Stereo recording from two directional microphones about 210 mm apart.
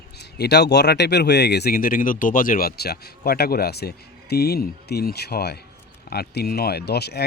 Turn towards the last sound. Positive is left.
turn(degrees=50)  # may be behind; listen again after turning